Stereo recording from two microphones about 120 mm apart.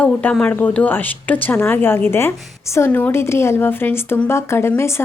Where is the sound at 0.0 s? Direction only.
10° left (ahead or behind).